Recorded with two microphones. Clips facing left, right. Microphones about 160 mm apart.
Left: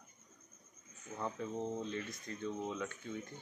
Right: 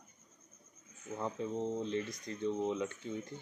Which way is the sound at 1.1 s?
5° right (ahead or behind).